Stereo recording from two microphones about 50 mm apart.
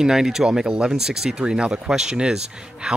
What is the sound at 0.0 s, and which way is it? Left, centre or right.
Speech, centre.